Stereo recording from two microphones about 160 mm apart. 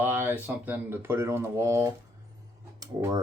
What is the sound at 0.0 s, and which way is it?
Speech, 15° right (ahead or behind).